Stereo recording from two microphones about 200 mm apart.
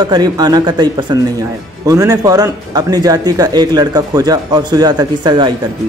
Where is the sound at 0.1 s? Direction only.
20° right (ahead or behind).